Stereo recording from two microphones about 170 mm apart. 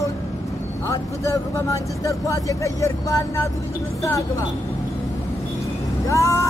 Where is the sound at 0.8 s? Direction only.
20° left (ahead or behind).